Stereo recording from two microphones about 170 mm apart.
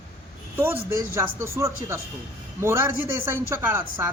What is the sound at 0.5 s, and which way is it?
Speech, 15° right (ahead or behind).